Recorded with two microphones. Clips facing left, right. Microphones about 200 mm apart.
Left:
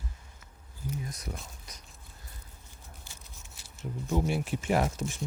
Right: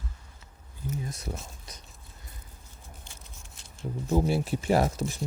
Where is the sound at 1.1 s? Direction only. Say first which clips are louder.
Right 3 dB; 30° right (ahead or behind).